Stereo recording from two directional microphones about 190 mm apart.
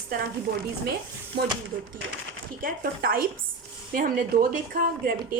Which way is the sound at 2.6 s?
50° right (ahead or behind).